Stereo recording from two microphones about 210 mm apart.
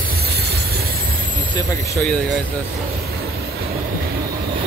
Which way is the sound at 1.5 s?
15° left (ahead or behind).